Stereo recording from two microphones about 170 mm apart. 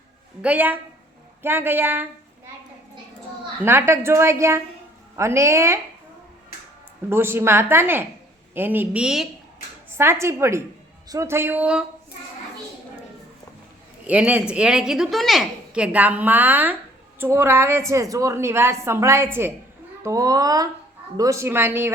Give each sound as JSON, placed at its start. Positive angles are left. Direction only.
{"t": 0.4, "sound": "a woman's voice", "side_deg": -10}
{"t": 3.6, "sound": "a woman's voice", "side_deg": -15}
{"t": 7.1, "sound": "a woman's voice", "side_deg": -15}
{"t": 9.9, "sound": "a woman's voice", "side_deg": -15}
{"t": 14.1, "sound": "a woman's voice", "side_deg": -10}